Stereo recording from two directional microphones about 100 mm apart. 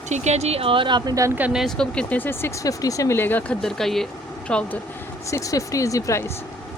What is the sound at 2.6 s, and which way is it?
Speech, 35° left (ahead or behind).